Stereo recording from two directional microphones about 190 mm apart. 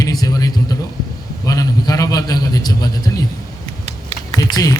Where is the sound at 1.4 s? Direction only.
20° left (ahead or behind).